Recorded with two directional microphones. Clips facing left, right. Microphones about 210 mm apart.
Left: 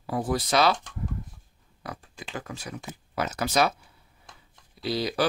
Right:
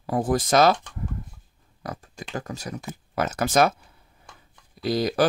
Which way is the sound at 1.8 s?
40° right (ahead or behind).